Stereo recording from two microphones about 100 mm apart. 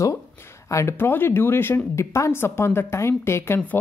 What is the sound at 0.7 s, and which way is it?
Speech, 30° left (ahead or behind).